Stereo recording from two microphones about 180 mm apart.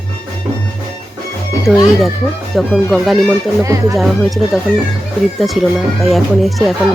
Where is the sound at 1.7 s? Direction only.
5° left (ahead or behind).